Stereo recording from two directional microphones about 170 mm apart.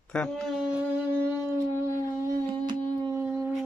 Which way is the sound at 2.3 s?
25° right (ahead or behind).